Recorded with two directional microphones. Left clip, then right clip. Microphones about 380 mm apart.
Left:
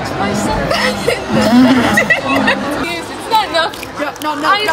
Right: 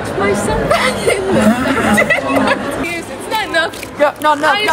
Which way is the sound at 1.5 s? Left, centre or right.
Left.